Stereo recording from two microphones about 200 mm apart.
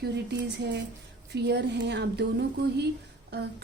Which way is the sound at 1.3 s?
55° right (ahead or behind).